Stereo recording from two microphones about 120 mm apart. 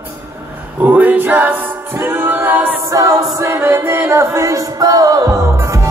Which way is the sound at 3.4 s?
20° right (ahead or behind).